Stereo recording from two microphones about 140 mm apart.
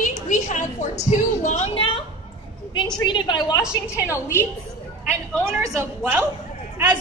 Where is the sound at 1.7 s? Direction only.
40° left (ahead or behind).